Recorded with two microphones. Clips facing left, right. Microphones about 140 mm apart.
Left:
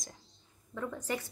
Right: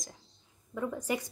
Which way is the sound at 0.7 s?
10° right (ahead or behind).